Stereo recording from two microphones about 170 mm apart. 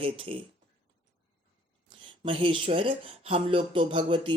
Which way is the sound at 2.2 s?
30° right (ahead or behind).